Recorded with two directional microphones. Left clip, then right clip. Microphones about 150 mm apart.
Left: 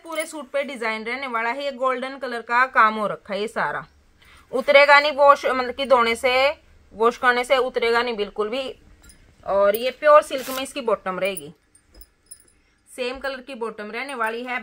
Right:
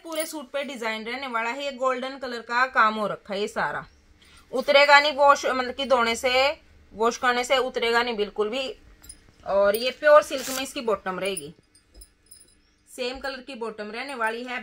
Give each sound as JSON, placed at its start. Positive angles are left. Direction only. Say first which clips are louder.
{"t": 0.0, "sound": "speech", "louder": "left 2 dB", "side_deg": 5}
{"t": 9.5, "sound": "speech", "louder": "left 2 dB", "side_deg": 20}
{"t": 12.9, "sound": "speech", "louder": "left 3 dB", "side_deg": 15}